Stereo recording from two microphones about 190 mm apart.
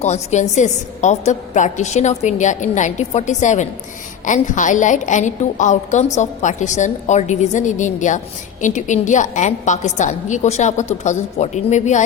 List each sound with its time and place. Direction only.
0.0 s a woman's voice: 35° left (ahead or behind)